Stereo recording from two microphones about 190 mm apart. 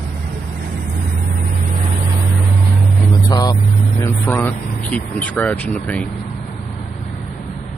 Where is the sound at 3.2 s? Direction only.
20° left (ahead or behind).